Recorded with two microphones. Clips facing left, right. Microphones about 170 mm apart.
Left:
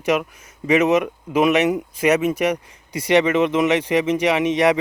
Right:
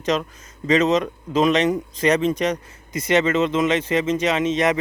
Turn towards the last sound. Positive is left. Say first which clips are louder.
# left 3 dB
turn(degrees=15)  # may be behind; listen again after turning